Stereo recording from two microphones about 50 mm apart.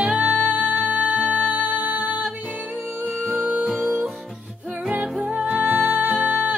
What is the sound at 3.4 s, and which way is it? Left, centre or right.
Music, right.